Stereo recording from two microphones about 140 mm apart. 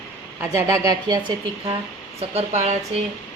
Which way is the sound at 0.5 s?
25° right (ahead or behind).